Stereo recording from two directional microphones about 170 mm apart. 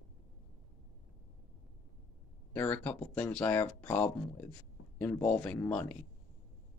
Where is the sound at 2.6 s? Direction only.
10° left (ahead or behind).